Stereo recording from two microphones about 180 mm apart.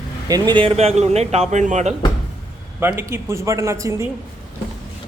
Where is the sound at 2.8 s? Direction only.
15° right (ahead or behind).